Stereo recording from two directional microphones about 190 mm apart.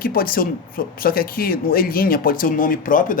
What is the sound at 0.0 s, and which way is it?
Speech, 50° left (ahead or behind).